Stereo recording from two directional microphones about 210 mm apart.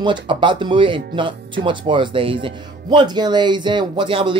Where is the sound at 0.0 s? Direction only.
25° right (ahead or behind).